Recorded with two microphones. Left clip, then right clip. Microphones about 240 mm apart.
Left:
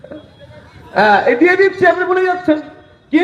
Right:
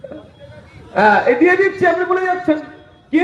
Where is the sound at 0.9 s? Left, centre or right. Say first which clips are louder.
Left 1 dB; left.